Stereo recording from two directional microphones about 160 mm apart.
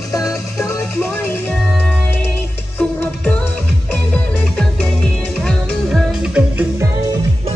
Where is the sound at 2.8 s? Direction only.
10° left (ahead or behind).